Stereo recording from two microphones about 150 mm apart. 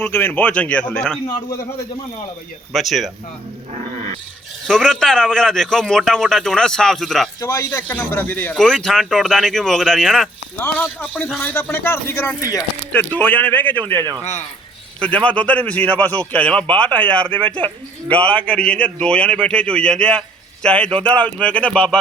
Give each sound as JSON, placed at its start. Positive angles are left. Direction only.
{"t": 0.0, "sound": "a man's voice", "side_deg": 15}
{"t": 2.7, "sound": "a man's voice", "side_deg": 0}
{"t": 4.6, "sound": "a man's voice", "side_deg": 5}
{"t": 7.4, "sound": "speech", "side_deg": 20}
{"t": 7.9, "sound": "a man's voice", "side_deg": 10}
{"t": 10.6, "sound": "a man's voice", "side_deg": 15}
{"t": 10.8, "sound": "a man's voice", "side_deg": 0}
{"t": 12.9, "sound": "a man's voice", "side_deg": 10}
{"t": 15.0, "sound": "a man's voice", "side_deg": 5}